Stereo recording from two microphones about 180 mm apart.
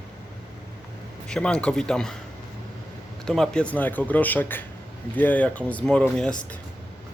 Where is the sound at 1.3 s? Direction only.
5° left (ahead or behind).